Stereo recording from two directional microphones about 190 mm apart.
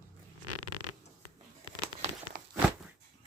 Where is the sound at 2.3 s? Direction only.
45° right (ahead or behind).